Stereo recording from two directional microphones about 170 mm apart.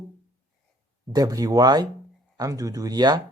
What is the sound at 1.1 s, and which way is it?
Speech, 20° right (ahead or behind).